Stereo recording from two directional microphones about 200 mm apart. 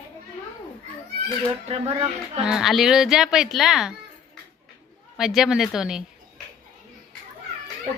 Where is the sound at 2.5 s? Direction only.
Centre (ahead or behind).